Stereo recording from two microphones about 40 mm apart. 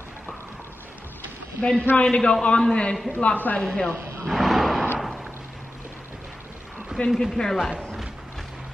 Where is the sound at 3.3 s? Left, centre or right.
Left.